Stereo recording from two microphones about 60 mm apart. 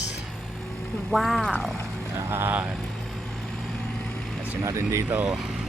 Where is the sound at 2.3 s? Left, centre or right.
Right.